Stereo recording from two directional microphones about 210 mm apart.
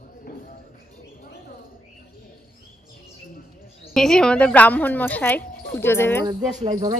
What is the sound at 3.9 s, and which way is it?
Speech, 5° left (ahead or behind).